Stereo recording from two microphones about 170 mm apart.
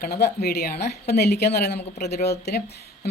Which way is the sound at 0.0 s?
65° left (ahead or behind).